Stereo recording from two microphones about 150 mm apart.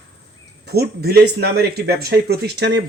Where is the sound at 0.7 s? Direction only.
90° right.